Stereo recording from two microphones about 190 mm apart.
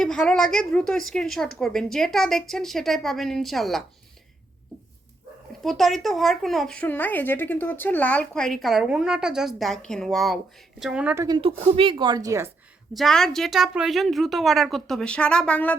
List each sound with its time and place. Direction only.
0.0 s speech: 5° left (ahead or behind)
5.6 s a woman's voice: centre (ahead or behind); by 11.3 s 15° right (ahead or behind)
11.3 s speech: 30° right (ahead or behind)
12.9 s speech: centre (ahead or behind)